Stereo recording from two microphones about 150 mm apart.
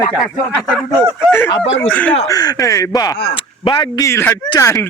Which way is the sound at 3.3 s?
35° left (ahead or behind).